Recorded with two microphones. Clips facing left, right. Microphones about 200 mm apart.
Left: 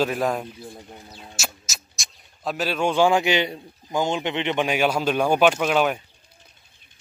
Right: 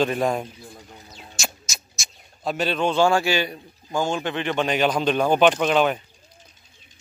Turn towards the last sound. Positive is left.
turn(degrees=5)  # may be behind; listen again after turning